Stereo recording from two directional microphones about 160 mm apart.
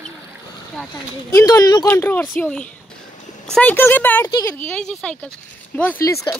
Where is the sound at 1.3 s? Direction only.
20° left (ahead or behind).